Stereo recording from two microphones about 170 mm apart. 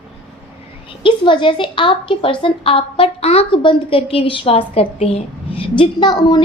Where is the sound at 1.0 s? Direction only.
30° left (ahead or behind).